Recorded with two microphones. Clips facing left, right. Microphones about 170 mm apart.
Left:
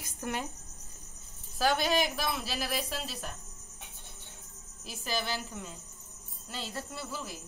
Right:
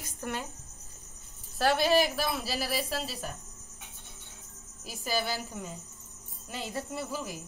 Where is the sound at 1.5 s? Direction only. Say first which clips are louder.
Right 3 dB; centre (ahead or behind).